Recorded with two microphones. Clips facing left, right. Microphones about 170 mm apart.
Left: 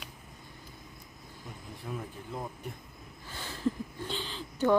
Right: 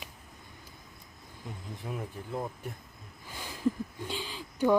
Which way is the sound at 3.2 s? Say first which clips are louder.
Right 2 dB; 10° right (ahead or behind).